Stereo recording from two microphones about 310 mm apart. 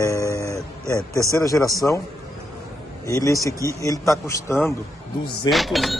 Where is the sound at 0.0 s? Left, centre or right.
Centre.